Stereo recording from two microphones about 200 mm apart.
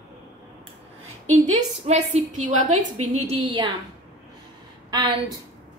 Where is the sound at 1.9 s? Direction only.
30° right (ahead or behind).